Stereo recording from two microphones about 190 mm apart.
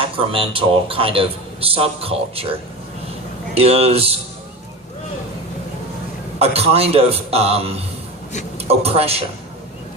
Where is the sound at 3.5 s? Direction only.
30° right (ahead or behind).